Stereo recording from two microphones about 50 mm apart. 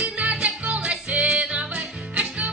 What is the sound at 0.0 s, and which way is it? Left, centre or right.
Music, right.